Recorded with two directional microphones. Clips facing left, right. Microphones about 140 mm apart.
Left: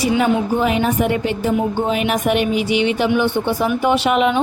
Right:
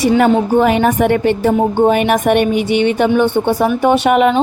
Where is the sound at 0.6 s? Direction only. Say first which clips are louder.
Right 5 dB; 65° right (ahead or behind).